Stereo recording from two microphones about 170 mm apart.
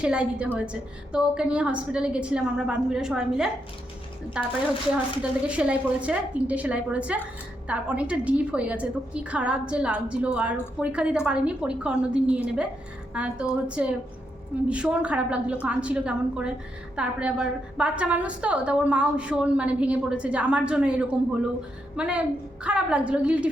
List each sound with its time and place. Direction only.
0.0 s a woman's voice: 5° right (ahead or behind)